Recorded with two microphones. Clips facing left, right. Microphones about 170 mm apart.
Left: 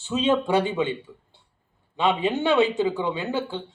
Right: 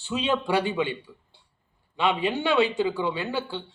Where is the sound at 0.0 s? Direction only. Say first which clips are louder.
Left 4 dB; 20° left (ahead or behind).